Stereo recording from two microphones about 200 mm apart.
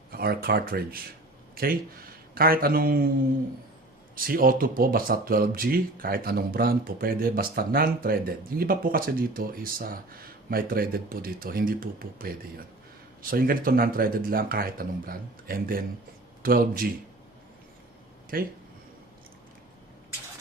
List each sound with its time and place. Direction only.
0.1 s a sound: 50° right (ahead or behind)
0.4 s speech: 50° right (ahead or behind)
4.1 s speech: 45° right (ahead or behind)
18.3 s speech: 45° right (ahead or behind)